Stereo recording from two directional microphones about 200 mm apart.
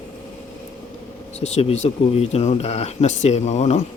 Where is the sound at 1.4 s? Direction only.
35° left (ahead or behind).